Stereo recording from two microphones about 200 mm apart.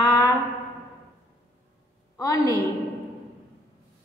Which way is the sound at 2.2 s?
15° left (ahead or behind).